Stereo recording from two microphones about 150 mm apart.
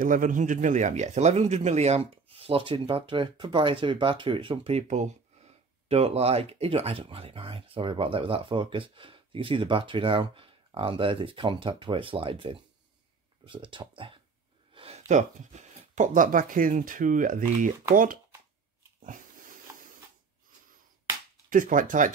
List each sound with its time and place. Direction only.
0.0 s speech: 60° right (ahead or behind); by 14.1 s 35° right (ahead or behind)
14.7 s a sound: 35° right (ahead or behind)
15.0 s speech: 50° right (ahead or behind)
21.5 s speech: 65° right (ahead or behind)